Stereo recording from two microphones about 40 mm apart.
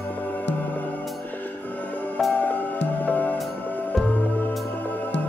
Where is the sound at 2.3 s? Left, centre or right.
Left.